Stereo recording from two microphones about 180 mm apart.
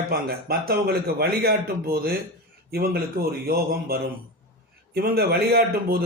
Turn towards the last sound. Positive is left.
turn(degrees=-55)  # may be behind; listen again after turning